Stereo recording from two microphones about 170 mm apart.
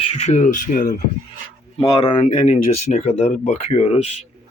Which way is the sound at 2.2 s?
45° left (ahead or behind).